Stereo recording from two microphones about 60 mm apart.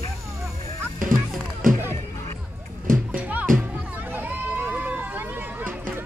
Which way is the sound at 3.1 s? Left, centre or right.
Right.